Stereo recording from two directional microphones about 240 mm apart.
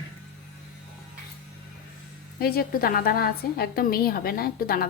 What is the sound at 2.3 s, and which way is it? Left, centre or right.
A woman's voice, left.